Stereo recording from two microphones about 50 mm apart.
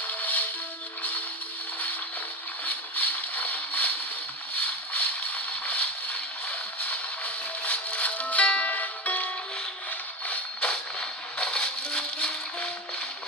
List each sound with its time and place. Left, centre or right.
0.0 s music: left
2.6 s boat: left
4.5 s a sound: left
11.0 s music: centre